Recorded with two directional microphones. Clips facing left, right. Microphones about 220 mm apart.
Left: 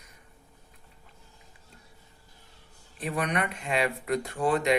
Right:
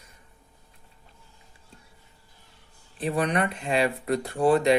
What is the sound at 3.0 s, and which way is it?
Speech, 30° right (ahead or behind).